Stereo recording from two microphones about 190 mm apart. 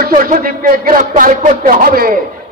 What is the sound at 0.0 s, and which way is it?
A man's voice, 50° right (ahead or behind).